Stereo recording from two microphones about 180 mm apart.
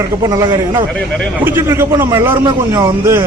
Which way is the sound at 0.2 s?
20° right (ahead or behind).